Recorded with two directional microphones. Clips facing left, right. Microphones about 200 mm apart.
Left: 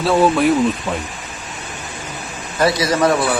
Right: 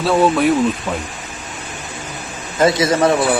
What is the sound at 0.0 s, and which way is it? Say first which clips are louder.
Speech: even; centre (ahead or behind).